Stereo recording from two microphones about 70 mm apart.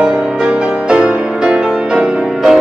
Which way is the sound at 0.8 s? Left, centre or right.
Centre.